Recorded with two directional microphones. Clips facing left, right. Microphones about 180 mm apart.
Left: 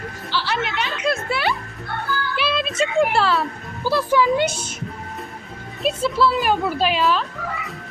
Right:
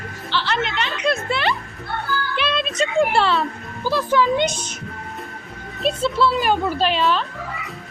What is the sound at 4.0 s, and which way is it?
Speech, 10° left (ahead or behind).